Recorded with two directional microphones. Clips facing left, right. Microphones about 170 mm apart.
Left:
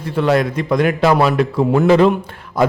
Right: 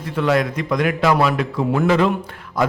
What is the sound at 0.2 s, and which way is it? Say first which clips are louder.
A man's voice: left 3 dB; 30° left (ahead or behind).